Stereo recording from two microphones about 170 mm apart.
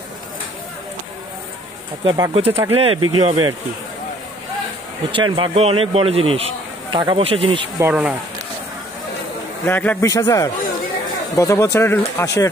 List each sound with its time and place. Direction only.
2.0 s speech: 20° right (ahead or behind)
2.3 s speech: 35° right (ahead or behind)
5.1 s speech: 30° right (ahead or behind)
7.8 s speech: 5° right (ahead or behind)
9.7 s speech: 10° left (ahead or behind)